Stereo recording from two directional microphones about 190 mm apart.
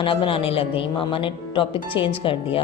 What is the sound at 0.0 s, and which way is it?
Speech, 25° left (ahead or behind).